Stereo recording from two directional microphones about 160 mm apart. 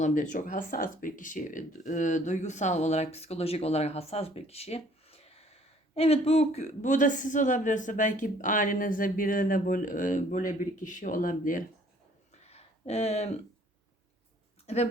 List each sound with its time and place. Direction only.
0.0 s speech: 55° left (ahead or behind)
12.3 s a sound: 40° left (ahead or behind)
14.7 s speech: 40° left (ahead or behind)